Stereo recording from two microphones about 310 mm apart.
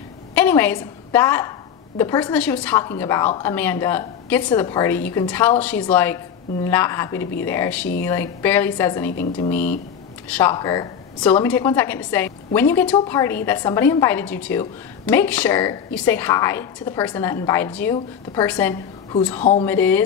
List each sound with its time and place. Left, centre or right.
0.3 s a woman's voice: centre